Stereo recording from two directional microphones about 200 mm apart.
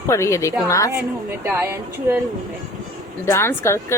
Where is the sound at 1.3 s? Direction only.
10° right (ahead or behind).